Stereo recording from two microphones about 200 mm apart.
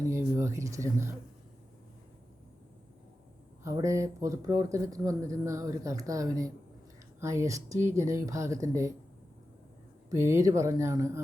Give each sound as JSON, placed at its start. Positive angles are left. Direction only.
{"t": 0.1, "sound": "speech", "side_deg": -15}
{"t": 3.6, "sound": "speech", "side_deg": -15}
{"t": 10.1, "sound": "speech", "side_deg": -15}